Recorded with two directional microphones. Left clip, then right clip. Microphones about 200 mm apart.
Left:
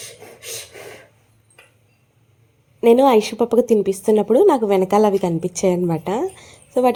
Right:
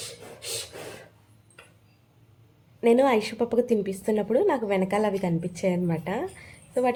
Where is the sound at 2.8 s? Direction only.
35° left (ahead or behind).